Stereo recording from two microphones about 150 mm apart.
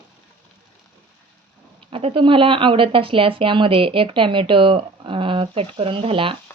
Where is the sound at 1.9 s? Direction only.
40° right (ahead or behind).